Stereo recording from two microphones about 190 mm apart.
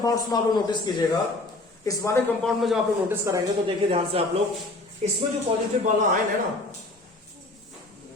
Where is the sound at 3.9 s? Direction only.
30° right (ahead or behind).